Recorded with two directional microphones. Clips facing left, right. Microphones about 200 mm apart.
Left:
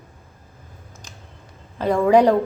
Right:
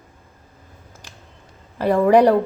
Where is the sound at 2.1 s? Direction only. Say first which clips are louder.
Right 1 dB; 15° left (ahead or behind).